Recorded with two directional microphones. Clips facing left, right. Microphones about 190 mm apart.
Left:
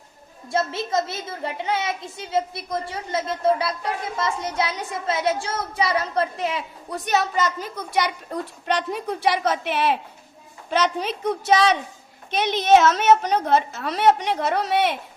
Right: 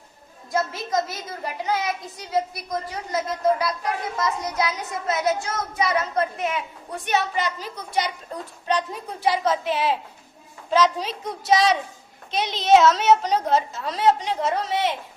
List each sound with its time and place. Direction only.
0.5 s a woman's voice: 25° left (ahead or behind); by 7.7 s 45° left (ahead or behind)
8.6 s a woman's voice: 70° left (ahead or behind)